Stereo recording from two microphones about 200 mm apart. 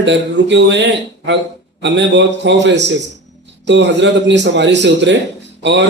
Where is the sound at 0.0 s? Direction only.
60° right (ahead or behind).